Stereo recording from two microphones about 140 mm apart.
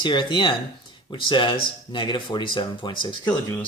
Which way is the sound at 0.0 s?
35° left (ahead or behind).